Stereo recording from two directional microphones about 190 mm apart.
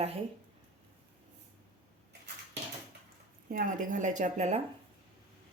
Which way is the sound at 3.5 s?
45° right (ahead or behind).